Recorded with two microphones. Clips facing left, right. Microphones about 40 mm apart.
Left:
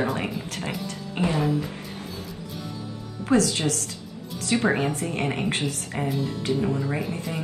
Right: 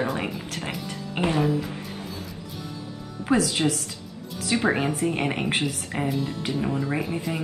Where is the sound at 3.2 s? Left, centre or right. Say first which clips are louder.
Even; centre.